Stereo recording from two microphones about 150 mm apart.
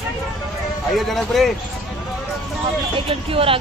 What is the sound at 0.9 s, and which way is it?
Speech, centre (ahead or behind).